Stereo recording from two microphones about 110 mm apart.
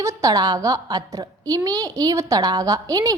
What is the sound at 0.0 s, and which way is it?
A woman's voice, 30° right (ahead or behind).